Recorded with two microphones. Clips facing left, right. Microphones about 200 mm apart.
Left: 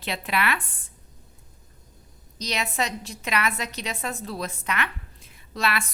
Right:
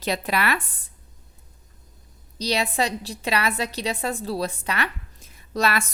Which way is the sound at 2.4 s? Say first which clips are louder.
Right 5 dB; 30° right (ahead or behind).